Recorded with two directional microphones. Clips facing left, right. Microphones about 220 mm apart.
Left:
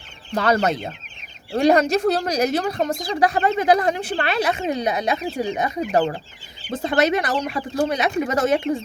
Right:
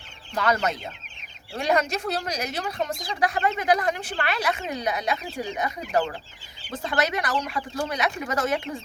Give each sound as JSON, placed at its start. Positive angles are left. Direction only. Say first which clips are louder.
{"t": 0.3, "sound": "speech", "louder": "left 5 dB", "side_deg": 30}